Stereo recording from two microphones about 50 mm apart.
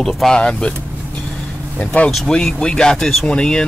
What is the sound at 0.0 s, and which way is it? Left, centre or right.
Speech, centre.